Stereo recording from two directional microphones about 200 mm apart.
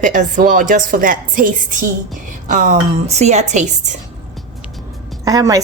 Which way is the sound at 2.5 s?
40° right (ahead or behind).